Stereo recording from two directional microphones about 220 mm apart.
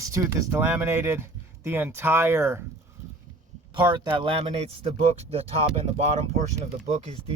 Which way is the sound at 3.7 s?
20° right (ahead or behind).